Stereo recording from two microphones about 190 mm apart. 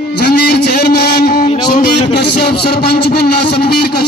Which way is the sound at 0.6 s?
60° left (ahead or behind).